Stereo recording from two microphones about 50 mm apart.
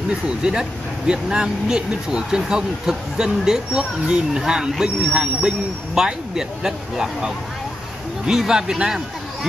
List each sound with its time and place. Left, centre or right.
0.4 s a man's voice: centre